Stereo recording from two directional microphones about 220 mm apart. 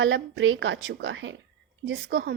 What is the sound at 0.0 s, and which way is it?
Speech, 60° right (ahead or behind).